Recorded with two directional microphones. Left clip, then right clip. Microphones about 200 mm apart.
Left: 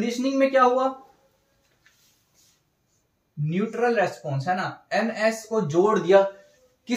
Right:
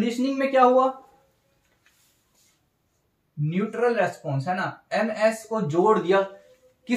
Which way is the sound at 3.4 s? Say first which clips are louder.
Even; 15° right (ahead or behind).